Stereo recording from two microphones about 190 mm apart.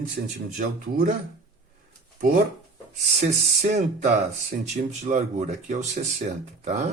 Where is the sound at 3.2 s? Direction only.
35° right (ahead or behind).